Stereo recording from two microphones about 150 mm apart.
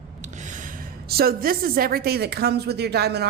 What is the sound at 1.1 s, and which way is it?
A woman's voice, 85° right.